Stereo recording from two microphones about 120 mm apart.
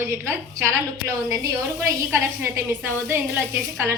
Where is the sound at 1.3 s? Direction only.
25° right (ahead or behind).